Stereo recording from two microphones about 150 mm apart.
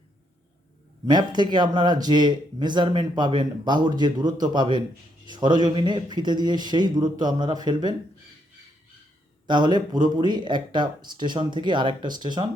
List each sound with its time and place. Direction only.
1.0 s speech: 30° right (ahead or behind)
9.5 s speech: 30° right (ahead or behind)